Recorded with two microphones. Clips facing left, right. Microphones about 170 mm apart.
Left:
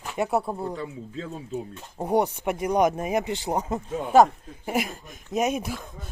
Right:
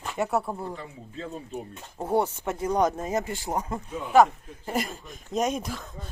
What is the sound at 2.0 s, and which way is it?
Speech, 15° left (ahead or behind).